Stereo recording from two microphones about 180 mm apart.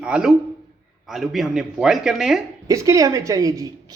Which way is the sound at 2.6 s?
20° right (ahead or behind).